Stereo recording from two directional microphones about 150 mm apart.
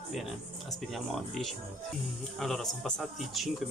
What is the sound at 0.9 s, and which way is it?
Speech, centre (ahead or behind).